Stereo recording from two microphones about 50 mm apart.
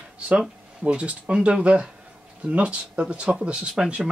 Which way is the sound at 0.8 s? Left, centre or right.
Right.